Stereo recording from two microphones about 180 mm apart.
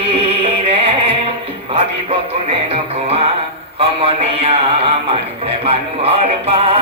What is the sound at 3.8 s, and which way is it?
Music, 35° right (ahead or behind).